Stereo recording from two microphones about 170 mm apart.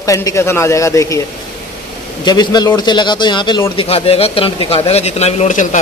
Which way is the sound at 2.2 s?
25° left (ahead or behind).